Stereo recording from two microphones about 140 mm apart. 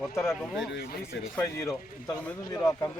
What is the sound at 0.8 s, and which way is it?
Speech, 90° left.